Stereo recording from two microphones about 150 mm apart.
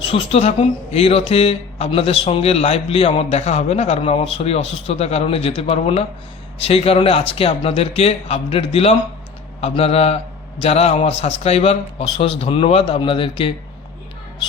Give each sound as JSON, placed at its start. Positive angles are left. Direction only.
{"t": 0.0, "sound": "speech", "side_deg": 35}